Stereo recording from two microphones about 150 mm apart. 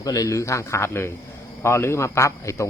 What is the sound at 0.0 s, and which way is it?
Speech, 25° left (ahead or behind).